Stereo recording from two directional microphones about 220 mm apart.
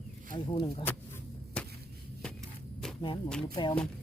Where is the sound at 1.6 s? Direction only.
5° left (ahead or behind).